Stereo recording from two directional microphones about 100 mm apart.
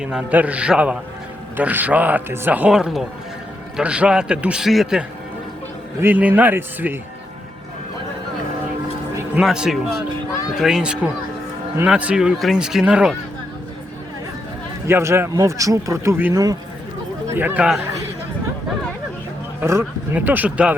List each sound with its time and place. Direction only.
0.0 s a man's voice: 10° right (ahead or behind)
6.0 s speech: 20° right (ahead or behind)
9.4 s a man's voice: 5° right (ahead or behind)
14.8 s speech: 25° right (ahead or behind)
15.3 s speech: 35° right (ahead or behind)
16.3 s speech: 35° right (ahead or behind)
17.2 s speech: 20° right (ahead or behind)
20.1 s a man's voice: 15° right (ahead or behind)